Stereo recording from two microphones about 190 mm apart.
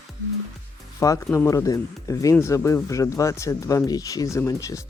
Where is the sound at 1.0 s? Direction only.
15° left (ahead or behind).